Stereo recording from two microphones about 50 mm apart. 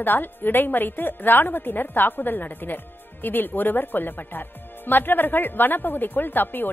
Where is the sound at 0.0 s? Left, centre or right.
Left.